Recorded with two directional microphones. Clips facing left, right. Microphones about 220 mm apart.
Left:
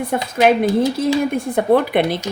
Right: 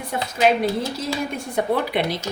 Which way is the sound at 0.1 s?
55° left (ahead or behind).